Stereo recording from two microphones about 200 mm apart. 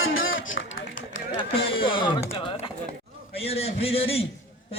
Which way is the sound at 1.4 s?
25° left (ahead or behind).